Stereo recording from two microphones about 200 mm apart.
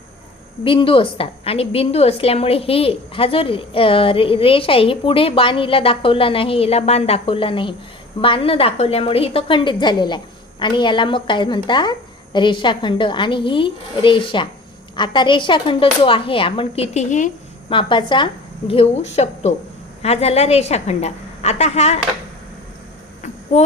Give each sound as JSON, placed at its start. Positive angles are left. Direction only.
{"t": 0.6, "sound": "a woman's voice", "side_deg": 25}
{"t": 17.7, "sound": "a woman's voice", "side_deg": 25}
{"t": 23.2, "sound": "a sound", "side_deg": 35}